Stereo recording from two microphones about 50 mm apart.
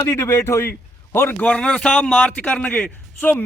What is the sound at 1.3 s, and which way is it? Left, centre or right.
Speech, left.